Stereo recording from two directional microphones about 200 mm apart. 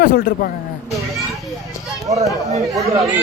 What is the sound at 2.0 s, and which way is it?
Speech, 15° right (ahead or behind).